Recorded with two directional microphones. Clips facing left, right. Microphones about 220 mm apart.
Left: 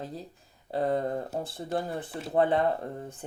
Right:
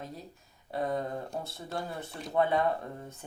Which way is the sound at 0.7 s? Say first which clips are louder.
Left 5 dB; 30° left (ahead or behind).